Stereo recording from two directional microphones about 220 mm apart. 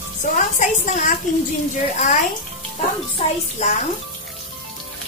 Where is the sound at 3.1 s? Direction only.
30° left (ahead or behind).